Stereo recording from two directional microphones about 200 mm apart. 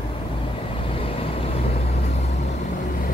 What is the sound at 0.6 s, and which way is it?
Vehicle, 25° left (ahead or behind).